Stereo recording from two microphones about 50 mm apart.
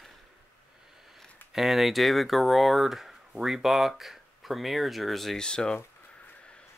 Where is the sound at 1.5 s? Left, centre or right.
Centre.